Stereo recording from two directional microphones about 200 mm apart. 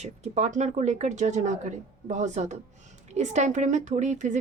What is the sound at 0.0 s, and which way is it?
A woman's voice, 35° right (ahead or behind).